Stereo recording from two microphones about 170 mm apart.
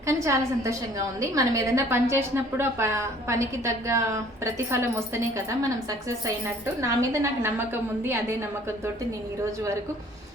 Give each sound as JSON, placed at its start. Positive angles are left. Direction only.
{"t": 0.0, "sound": "a woman's voice", "side_deg": -15}